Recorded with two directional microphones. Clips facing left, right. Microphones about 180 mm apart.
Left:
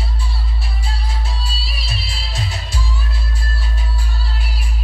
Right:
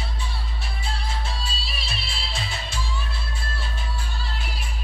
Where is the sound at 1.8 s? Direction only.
35° left (ahead or behind).